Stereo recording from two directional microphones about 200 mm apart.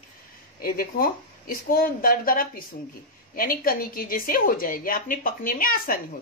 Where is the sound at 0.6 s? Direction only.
45° left (ahead or behind).